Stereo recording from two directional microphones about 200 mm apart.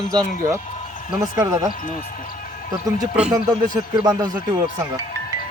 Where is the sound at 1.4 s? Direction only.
20° right (ahead or behind).